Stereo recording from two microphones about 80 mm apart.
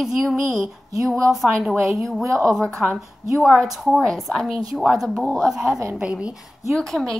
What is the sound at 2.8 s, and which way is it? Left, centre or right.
Speech, centre.